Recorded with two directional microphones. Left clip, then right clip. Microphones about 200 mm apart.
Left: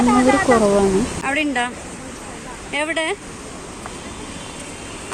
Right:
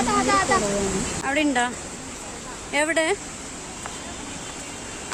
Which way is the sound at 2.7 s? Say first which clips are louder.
Even; 20° right (ahead or behind).